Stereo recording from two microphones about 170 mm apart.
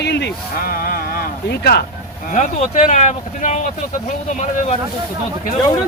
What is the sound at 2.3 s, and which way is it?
Speech, 45° left (ahead or behind).